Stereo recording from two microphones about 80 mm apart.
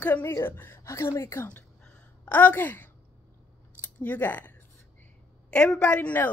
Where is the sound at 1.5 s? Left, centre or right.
Centre.